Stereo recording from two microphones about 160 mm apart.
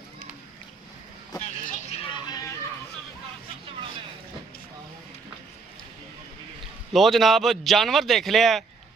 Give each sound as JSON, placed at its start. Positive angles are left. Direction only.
{"t": 1.5, "sound": "vehicle", "side_deg": 45}
{"t": 6.9, "sound": "a man's voice", "side_deg": 0}